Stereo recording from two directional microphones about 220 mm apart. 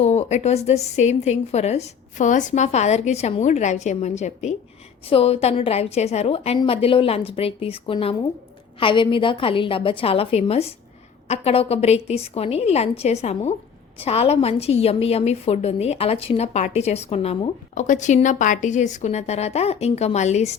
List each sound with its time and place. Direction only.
0.0 s a woman's voice: 30° left (ahead or behind)